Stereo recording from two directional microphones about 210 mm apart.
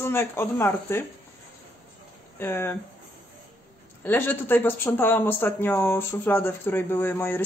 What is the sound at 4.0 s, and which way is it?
Speech, 10° left (ahead or behind).